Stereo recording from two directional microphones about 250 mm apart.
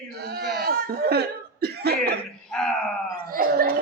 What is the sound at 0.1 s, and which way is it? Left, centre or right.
Laughter, right.